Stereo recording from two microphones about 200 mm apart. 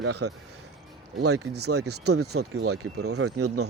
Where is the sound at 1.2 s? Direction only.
90° right.